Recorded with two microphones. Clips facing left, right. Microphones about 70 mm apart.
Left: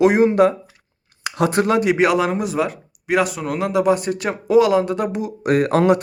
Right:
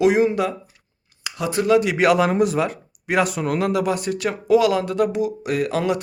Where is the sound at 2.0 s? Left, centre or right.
Centre.